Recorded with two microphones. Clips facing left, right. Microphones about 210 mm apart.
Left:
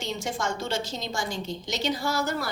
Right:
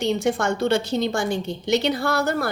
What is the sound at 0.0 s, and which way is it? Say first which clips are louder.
A woman's voice: right 9 dB; 60° right (ahead or behind).